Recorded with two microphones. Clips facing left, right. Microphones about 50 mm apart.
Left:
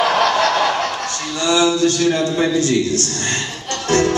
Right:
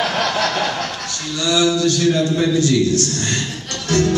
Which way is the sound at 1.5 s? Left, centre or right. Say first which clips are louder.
Left 1 dB; left.